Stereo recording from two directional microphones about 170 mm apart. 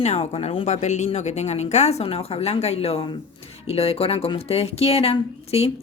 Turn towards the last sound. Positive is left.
turn(degrees=35)  # may be behind; listen again after turning